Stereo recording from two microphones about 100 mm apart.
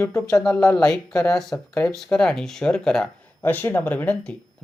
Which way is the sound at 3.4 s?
20° left (ahead or behind).